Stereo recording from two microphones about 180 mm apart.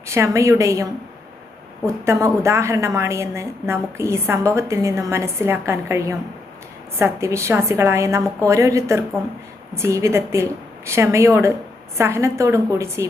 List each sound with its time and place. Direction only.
0.1 s a woman's voice: 15° right (ahead or behind)
2.0 s a woman's voice: 15° right (ahead or behind)